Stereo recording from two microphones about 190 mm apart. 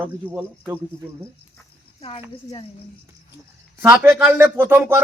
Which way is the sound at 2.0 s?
30° left (ahead or behind).